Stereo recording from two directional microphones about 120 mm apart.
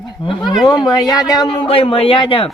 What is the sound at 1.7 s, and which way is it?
Speech, 50° left (ahead or behind).